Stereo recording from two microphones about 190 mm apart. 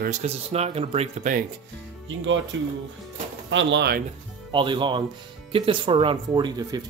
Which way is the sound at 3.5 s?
80° right.